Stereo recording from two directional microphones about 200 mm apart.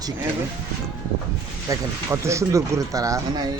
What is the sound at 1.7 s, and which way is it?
Speech, 15° right (ahead or behind).